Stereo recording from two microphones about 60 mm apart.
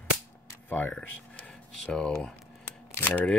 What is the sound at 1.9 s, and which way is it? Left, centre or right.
Speech, centre.